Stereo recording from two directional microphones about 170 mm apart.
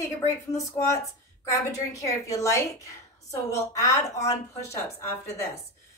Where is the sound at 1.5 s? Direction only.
20° left (ahead or behind).